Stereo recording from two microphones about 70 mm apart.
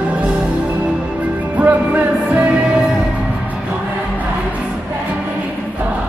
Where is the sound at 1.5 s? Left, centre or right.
Right.